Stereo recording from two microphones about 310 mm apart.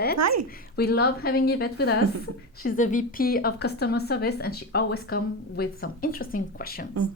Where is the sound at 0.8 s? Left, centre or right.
Left.